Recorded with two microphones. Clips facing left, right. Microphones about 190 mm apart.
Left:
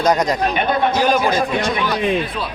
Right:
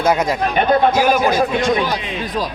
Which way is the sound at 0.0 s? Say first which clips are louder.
Even; 5° right (ahead or behind).